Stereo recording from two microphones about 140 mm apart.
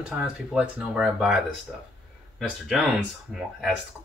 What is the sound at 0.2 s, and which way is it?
Speech, 5° right (ahead or behind).